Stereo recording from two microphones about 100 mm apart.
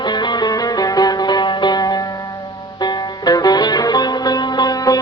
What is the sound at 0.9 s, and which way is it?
Music, 40° left (ahead or behind).